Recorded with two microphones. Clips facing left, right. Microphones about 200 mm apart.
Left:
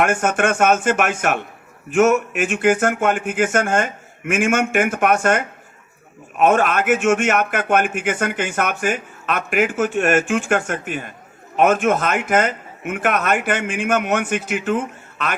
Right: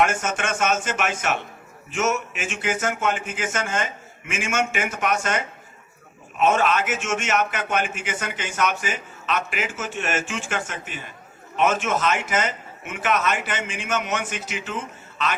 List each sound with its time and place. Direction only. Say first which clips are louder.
0.0 s a man's voice: left 5 dB; 55° left (ahead or behind)